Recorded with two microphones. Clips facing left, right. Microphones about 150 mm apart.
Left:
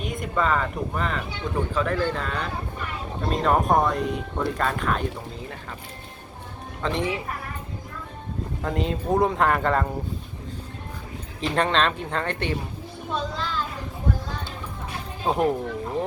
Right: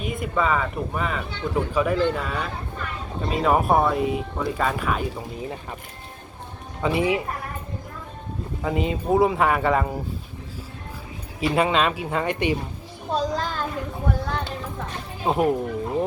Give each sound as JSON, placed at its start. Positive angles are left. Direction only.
{"t": 0.0, "sound": "speech", "side_deg": -5}
{"t": 6.8, "sound": "speech", "side_deg": -10}
{"t": 8.6, "sound": "speech", "side_deg": -5}
{"t": 11.3, "sound": "speech", "side_deg": -10}
{"t": 13.1, "sound": "child singing", "side_deg": -35}
{"t": 15.2, "sound": "speech", "side_deg": -5}